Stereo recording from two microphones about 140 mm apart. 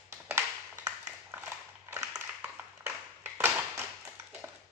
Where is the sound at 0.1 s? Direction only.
20° right (ahead or behind).